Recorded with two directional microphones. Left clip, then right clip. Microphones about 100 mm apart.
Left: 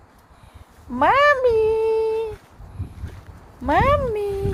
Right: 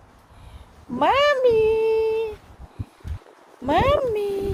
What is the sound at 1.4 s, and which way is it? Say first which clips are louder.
Humming: even; 90° left.